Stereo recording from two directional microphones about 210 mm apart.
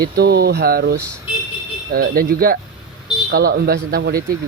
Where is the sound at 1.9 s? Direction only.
45° right (ahead or behind).